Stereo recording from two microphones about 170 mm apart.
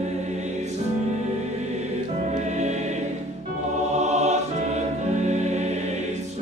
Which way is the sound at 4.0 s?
40° right (ahead or behind).